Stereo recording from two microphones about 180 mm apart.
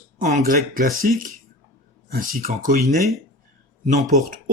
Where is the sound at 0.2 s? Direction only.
45° right (ahead or behind).